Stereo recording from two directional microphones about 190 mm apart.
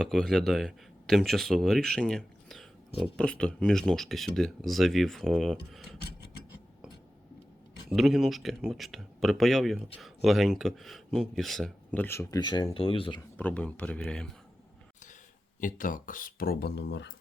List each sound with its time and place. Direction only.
0.0 s speech: centre (ahead or behind)
7.9 s speech: centre (ahead or behind); by 13.2 s 25° left (ahead or behind)
13.3 s speech: 5° left (ahead or behind)
15.6 s speech: 45° left (ahead or behind); by 17.1 s 65° left (ahead or behind)